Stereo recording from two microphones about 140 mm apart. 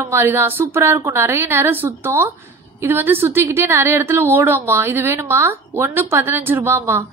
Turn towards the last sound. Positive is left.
turn(degrees=-15)  # may be behind; listen again after turning